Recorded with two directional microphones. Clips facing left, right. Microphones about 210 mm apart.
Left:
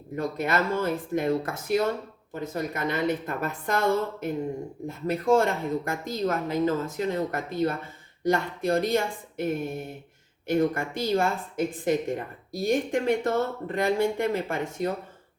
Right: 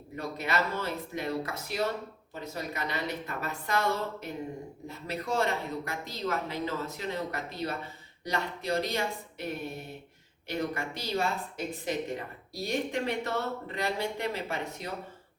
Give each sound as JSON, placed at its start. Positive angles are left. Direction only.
{"t": 0.2, "sound": "speech", "side_deg": 50}